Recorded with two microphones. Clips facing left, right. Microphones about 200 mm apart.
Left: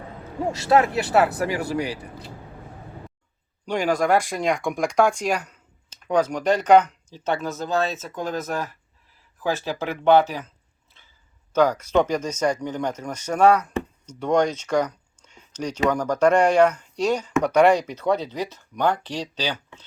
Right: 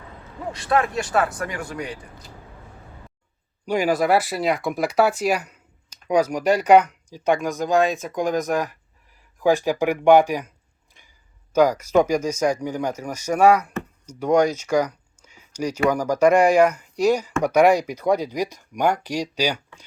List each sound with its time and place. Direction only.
0.4 s speech: 25° left (ahead or behind)
2.0 s speech: 60° left (ahead or behind)
3.7 s speech: 10° right (ahead or behind)
11.0 s a sound: 15° right (ahead or behind)
11.5 s speech: 10° right (ahead or behind)